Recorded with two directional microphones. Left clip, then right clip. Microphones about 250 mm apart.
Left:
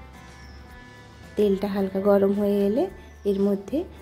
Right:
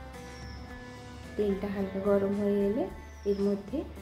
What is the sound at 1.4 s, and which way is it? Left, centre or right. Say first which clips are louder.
Speech: left 8 dB; left.